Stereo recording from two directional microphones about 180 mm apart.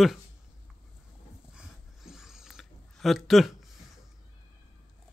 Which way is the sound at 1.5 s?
5° right (ahead or behind).